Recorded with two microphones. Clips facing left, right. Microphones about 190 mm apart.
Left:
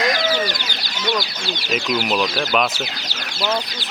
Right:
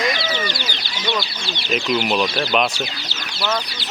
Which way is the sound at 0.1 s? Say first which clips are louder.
Left 3 dB; 45° left (ahead or behind).